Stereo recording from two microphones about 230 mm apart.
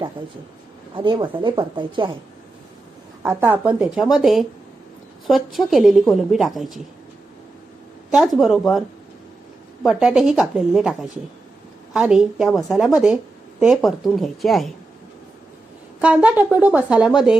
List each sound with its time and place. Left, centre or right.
0.9 s speech: centre
3.2 s a woman's voice: centre
8.1 s a woman's voice: centre
9.8 s a woman's voice: centre
11.9 s a woman's voice: centre
16.0 s a woman's voice: centre